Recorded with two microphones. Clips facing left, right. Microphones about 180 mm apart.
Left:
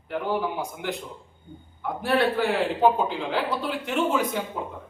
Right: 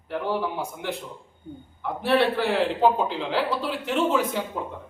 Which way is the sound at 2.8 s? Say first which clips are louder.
Even; centre (ahead or behind).